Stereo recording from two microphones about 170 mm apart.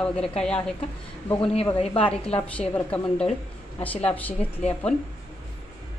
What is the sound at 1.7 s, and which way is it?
Speech, 35° left (ahead or behind).